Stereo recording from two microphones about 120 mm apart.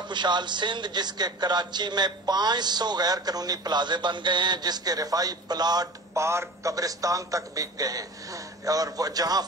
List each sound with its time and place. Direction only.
0.1 s a man's voice: 40° right (ahead or behind)